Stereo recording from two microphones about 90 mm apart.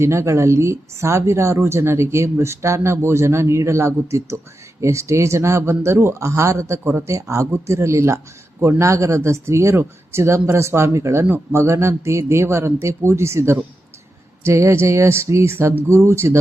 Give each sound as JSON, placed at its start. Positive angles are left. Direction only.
{"t": 0.0, "sound": "speech", "side_deg": -30}